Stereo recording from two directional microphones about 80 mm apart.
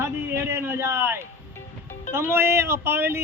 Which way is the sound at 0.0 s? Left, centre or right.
Right.